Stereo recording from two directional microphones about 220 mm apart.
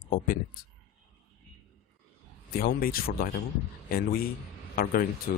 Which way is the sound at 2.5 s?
40° left (ahead or behind).